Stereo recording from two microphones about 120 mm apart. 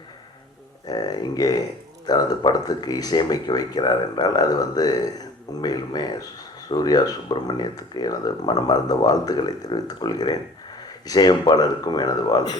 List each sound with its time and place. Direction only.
0.9 s speech: 35° left (ahead or behind)